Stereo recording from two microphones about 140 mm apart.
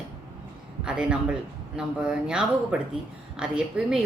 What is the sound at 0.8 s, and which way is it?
A woman's voice, 5° right (ahead or behind).